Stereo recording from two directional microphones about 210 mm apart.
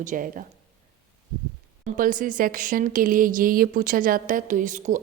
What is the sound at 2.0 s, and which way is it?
Speech, 40° right (ahead or behind).